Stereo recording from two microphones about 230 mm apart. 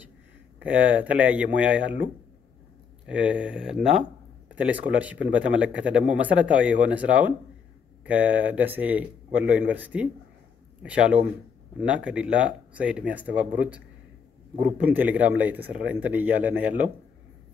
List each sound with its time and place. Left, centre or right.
0.6 s speech: centre
3.1 s speech: centre